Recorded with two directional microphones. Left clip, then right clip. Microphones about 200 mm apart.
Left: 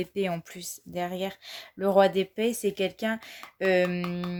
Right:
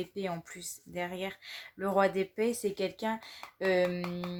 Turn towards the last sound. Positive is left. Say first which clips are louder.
# left 3 dB
turn(degrees=40)  # may be behind; listen again after turning